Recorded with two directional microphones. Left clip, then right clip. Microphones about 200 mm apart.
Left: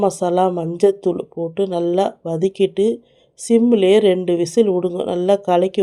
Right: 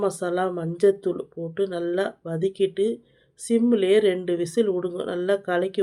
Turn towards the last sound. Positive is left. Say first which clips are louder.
# left 8 dB
turn(degrees=30)  # may be behind; listen again after turning